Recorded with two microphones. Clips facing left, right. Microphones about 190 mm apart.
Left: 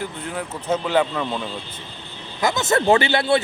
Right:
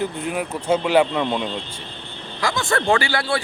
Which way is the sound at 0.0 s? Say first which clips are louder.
Right 4 dB; 15° right (ahead or behind).